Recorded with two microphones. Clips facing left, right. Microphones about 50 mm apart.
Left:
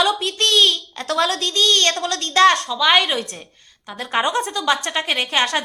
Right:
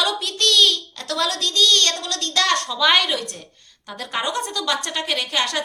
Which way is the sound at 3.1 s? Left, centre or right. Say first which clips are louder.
Left 2 dB; left.